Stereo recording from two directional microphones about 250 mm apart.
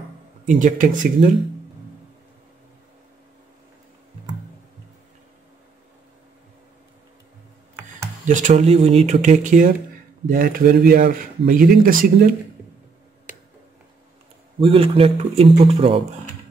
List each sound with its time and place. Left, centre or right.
0.5 s speech: right
8.3 s speech: right
14.6 s speech: right